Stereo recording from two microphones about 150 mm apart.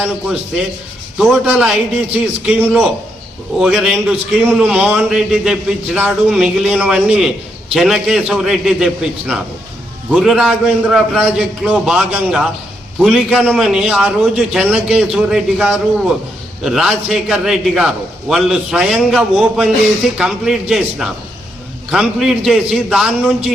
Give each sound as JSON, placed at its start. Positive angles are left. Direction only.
{"t": 1.5, "sound": "a man's voice", "side_deg": -5}
{"t": 3.6, "sound": "a man's voice", "side_deg": 0}